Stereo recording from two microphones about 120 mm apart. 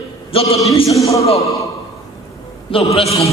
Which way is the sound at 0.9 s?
25° left (ahead or behind).